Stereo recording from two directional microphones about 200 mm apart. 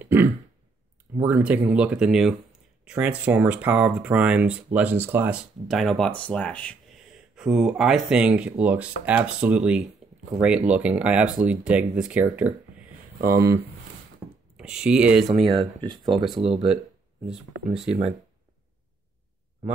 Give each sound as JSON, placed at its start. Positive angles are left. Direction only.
{"t": 0.0, "sound": "throat clearing", "side_deg": -10}
{"t": 1.1, "sound": "speech", "side_deg": -10}
{"t": 14.6, "sound": "speech", "side_deg": -5}
{"t": 15.5, "sound": "speech", "side_deg": -20}
{"t": 16.3, "sound": "speech", "side_deg": 0}